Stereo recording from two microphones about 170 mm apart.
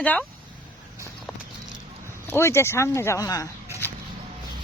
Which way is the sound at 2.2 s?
15° left (ahead or behind).